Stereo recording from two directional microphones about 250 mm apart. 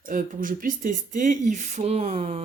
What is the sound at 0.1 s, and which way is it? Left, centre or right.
Speech, right.